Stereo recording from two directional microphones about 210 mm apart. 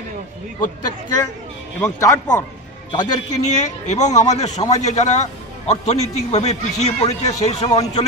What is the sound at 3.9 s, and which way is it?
Speech, 35° left (ahead or behind).